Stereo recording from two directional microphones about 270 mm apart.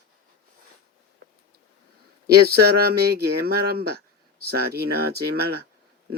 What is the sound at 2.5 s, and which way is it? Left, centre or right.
Speech, right.